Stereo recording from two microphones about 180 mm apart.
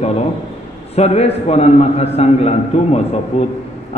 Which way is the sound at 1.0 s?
35° left (ahead or behind).